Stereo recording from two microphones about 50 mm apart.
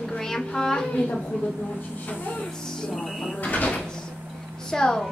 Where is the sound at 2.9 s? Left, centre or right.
Centre.